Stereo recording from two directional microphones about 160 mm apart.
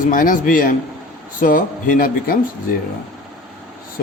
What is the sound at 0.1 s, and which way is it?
A man's voice, 55° left (ahead or behind).